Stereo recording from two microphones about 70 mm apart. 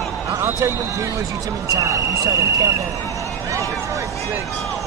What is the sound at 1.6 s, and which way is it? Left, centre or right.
Speech, right.